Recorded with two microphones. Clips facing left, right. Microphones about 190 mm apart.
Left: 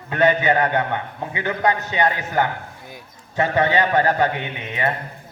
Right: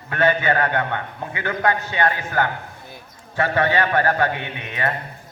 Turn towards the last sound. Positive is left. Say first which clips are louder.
# left 2 dB
turn(degrees=20)  # may be behind; listen again after turning